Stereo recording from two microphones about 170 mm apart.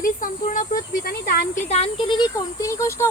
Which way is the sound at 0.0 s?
50° left (ahead or behind).